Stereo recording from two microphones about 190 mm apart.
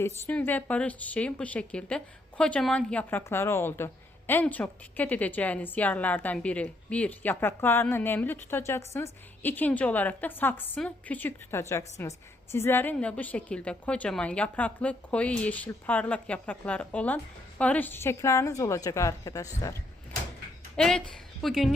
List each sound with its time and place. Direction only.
0.0 s a woman's voice: 10° left (ahead or behind)
20.7 s a woman's voice: 5° left (ahead or behind)